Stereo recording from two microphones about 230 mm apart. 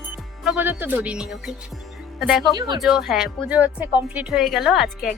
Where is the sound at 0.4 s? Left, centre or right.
Centre.